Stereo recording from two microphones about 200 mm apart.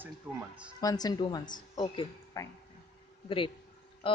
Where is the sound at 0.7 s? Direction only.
20° left (ahead or behind).